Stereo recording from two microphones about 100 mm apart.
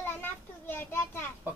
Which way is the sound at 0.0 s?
20° left (ahead or behind).